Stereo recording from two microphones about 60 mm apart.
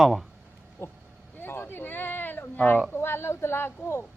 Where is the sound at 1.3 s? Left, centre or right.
Left.